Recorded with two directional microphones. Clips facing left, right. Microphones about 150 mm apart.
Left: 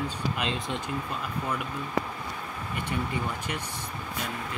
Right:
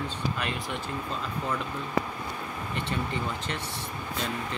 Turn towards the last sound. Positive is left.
turn(degrees=10)  # may be behind; listen again after turning